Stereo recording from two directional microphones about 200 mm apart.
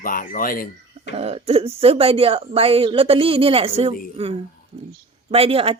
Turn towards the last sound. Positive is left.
turn(degrees=-30)  # may be behind; listen again after turning